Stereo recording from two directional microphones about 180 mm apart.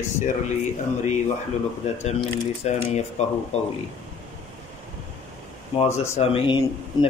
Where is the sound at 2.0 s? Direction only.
40° left (ahead or behind).